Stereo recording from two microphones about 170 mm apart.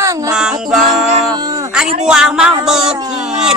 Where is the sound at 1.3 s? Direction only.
25° right (ahead or behind).